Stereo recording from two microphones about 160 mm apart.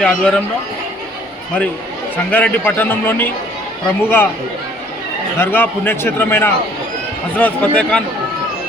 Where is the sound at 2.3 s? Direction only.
10° left (ahead or behind).